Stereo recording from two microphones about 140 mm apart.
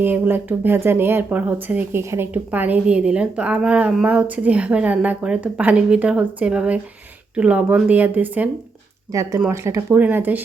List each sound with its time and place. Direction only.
0.0 s speech: 15° right (ahead or behind)
9.1 s speech: 25° right (ahead or behind)